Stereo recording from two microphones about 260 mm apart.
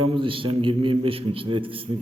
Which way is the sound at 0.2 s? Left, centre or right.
Centre.